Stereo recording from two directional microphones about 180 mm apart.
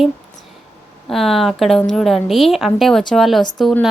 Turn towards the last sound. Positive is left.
turn(degrees=0)  # may be behind; listen again after turning